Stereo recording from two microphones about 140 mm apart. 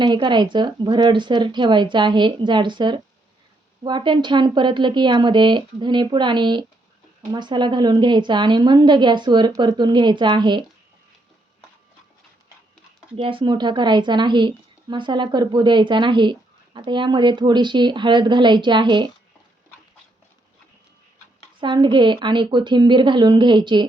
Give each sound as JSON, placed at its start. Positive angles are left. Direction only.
{"t": 0.0, "sound": "a woman's voice", "side_deg": -35}
{"t": 13.1, "sound": "a woman's voice", "side_deg": -40}
{"t": 21.6, "sound": "a woman's voice", "side_deg": -35}